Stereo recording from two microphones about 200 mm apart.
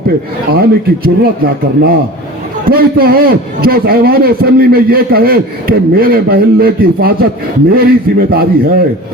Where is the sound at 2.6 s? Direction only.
50° right (ahead or behind).